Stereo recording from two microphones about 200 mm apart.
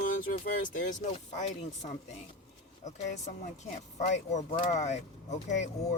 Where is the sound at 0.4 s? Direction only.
40° left (ahead or behind).